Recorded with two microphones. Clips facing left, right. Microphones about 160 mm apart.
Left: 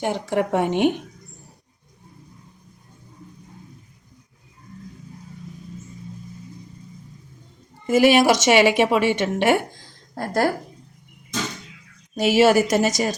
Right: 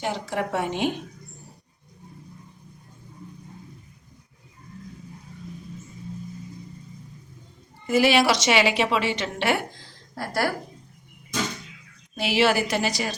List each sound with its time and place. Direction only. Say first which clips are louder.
0.0 s a woman's voice: left 5 dB; 55° left (ahead or behind)
7.9 s a woman's voice: left 4 dB; 45° left (ahead or behind)
12.1 s a woman's voice: left 6 dB; 45° left (ahead or behind)